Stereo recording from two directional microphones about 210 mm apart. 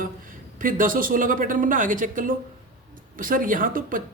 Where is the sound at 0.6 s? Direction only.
40° right (ahead or behind).